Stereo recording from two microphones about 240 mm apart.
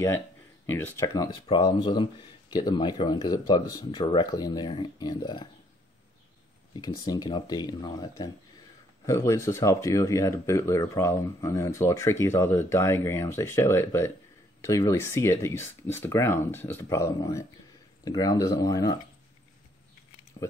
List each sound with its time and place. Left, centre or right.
0.7 s speech: centre
6.8 s speech: centre
20.4 s a sound: left